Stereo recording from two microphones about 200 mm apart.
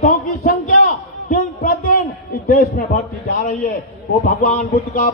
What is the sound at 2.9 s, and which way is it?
Speech, 40° left (ahead or behind).